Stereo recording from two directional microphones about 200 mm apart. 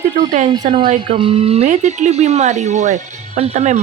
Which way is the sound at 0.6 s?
25° right (ahead or behind).